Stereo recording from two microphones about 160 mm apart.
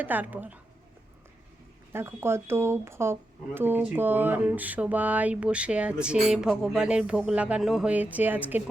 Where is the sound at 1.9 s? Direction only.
15° right (ahead or behind).